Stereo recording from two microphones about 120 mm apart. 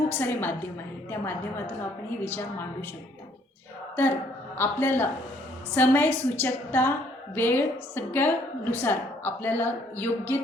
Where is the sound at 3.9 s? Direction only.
20° left (ahead or behind).